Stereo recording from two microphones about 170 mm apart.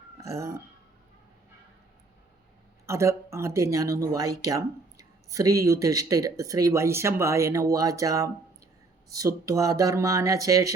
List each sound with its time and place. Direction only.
0.2 s speech: 20° right (ahead or behind)
2.8 s speech: 15° right (ahead or behind)